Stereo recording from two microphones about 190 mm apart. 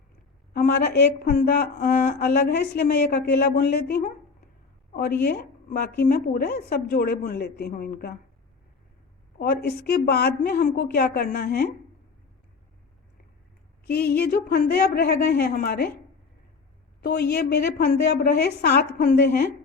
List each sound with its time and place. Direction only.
0.5 s a woman's voice: 55° left (ahead or behind)
5.2 s a woman's voice: 55° left (ahead or behind)
9.4 s a woman's voice: 55° left (ahead or behind)
13.8 s a woman's voice: 55° left (ahead or behind)
17.0 s a woman's voice: 60° left (ahead or behind)